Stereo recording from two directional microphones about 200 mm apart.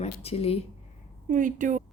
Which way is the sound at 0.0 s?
30° left (ahead or behind).